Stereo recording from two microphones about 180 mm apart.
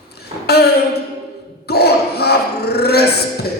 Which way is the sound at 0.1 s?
60° left (ahead or behind).